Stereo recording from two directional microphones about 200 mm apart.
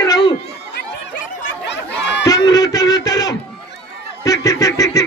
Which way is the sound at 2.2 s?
20° left (ahead or behind).